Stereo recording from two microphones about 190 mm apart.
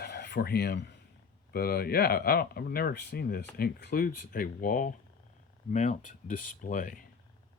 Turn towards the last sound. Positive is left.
turn(degrees=45)  # may be behind; listen again after turning